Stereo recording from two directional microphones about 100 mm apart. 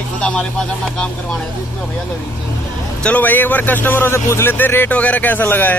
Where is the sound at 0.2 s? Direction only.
10° left (ahead or behind).